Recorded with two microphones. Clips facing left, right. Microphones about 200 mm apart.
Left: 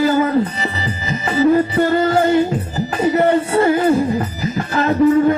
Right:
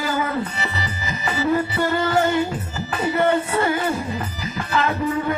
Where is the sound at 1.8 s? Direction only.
40° left (ahead or behind).